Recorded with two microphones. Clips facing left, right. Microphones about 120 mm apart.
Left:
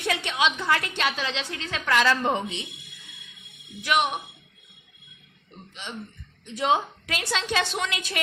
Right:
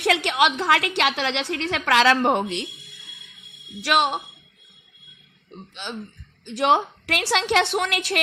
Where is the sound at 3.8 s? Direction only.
75° right (ahead or behind).